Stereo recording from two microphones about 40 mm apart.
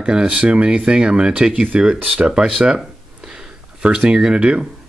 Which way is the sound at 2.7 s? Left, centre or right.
Centre.